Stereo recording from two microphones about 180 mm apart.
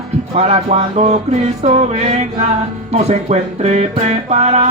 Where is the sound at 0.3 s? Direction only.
30° right (ahead or behind).